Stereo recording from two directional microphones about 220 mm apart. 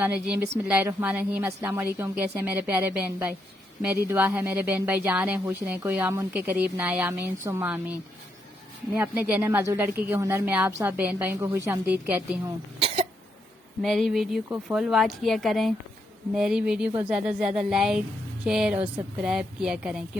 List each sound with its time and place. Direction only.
0.0 s speech: 10° right (ahead or behind)
9.0 s speech: 5° right (ahead or behind)
12.8 s cough: 25° right (ahead or behind)
13.8 s a woman's voice: centre (ahead or behind)